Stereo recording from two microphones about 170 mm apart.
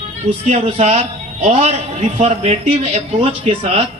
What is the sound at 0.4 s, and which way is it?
A man's voice, 40° right (ahead or behind).